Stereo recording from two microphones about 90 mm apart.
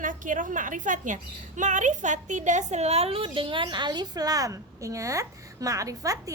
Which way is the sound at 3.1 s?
90° right.